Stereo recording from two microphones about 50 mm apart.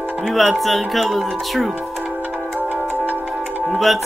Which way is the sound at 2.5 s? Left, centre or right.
Right.